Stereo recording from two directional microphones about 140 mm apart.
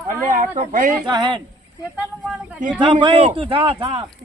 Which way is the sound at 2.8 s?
35° right (ahead or behind).